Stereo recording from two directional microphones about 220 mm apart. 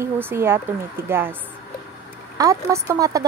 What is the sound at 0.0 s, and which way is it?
Speech, 10° right (ahead or behind).